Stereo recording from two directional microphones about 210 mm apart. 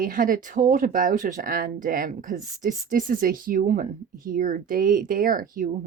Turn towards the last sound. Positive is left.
turn(degrees=-40)  # may be behind; listen again after turning